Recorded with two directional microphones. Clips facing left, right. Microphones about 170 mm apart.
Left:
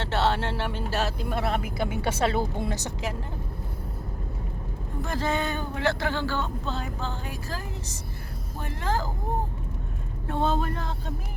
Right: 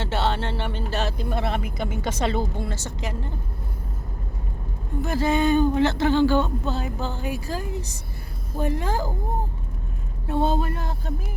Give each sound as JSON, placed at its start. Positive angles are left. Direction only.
{"t": 0.0, "sound": "speech", "side_deg": 0}
{"t": 5.0, "sound": "a woman's voice", "side_deg": -10}
{"t": 10.2, "sound": "a woman's voice", "side_deg": -10}